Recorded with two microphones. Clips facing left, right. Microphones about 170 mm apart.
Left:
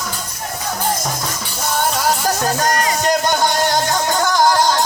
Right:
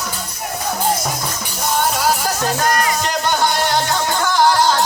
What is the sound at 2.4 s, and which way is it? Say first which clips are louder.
Music: even; 40° left (ahead or behind).